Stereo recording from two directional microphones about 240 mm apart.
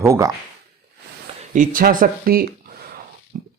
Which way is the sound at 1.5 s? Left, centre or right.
Right.